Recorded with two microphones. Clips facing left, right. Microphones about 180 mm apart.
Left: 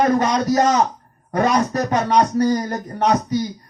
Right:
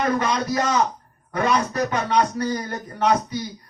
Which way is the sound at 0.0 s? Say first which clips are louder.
Left 5 dB; 40° left (ahead or behind).